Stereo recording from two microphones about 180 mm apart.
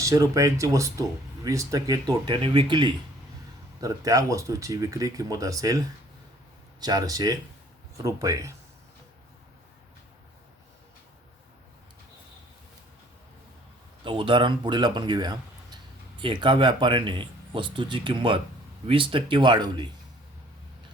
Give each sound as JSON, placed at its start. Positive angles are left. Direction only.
{"t": 0.0, "sound": "speech", "side_deg": -20}
{"t": 14.0, "sound": "speech", "side_deg": -30}